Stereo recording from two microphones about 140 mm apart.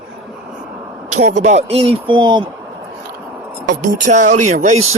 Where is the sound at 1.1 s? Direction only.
55° right (ahead or behind); by 2.4 s 35° right (ahead or behind).